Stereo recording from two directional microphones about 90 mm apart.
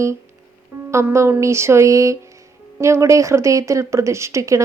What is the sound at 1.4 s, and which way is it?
Speech, 30° right (ahead or behind).